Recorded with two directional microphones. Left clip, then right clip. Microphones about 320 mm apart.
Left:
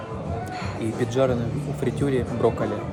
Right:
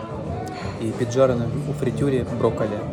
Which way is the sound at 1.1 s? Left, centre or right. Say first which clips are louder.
Right 5 dB; centre.